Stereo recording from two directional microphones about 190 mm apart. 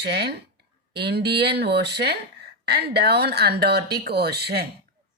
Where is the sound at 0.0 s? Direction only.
60° right (ahead or behind).